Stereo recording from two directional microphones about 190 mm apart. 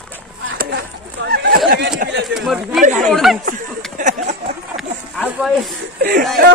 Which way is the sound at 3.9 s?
40° right (ahead or behind).